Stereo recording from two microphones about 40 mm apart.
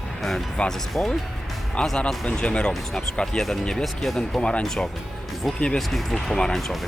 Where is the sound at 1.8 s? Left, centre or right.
Centre.